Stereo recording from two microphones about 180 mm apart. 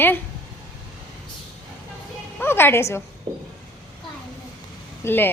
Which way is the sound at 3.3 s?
30° right (ahead or behind).